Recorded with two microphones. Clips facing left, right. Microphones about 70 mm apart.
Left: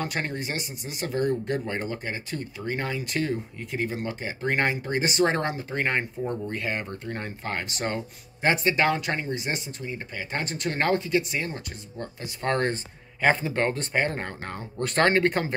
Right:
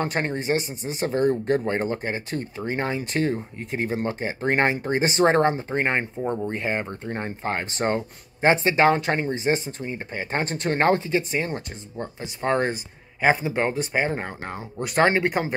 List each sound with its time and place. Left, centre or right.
0.0 s speech: right; by 15.5 s centre